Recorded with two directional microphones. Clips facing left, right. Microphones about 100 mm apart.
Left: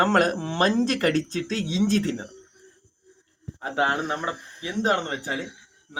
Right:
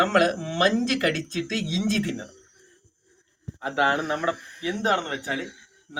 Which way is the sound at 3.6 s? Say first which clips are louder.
Right 1 dB; 30° left (ahead or behind).